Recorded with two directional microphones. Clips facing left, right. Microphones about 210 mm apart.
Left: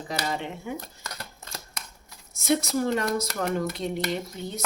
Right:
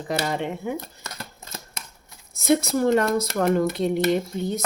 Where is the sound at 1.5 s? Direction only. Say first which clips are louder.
Right 2 dB; 25° right (ahead or behind).